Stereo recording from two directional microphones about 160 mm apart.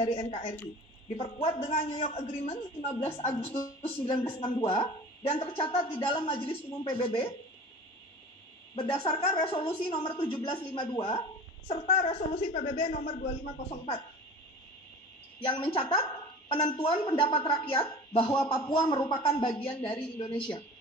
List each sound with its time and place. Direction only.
0.0 s a woman's voice: 35° left (ahead or behind)
4.1 s a woman's voice: 20° left (ahead or behind)
4.4 s a woman's voice: 35° left (ahead or behind)
8.7 s a woman's voice: 35° left (ahead or behind)
12.5 s speech: 50° left (ahead or behind)
15.4 s a woman's voice: 30° left (ahead or behind)